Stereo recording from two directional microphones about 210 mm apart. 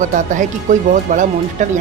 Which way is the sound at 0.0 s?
35° right (ahead or behind).